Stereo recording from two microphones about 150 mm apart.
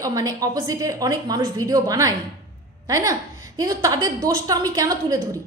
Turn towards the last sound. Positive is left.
turn(degrees=-25)  # may be behind; listen again after turning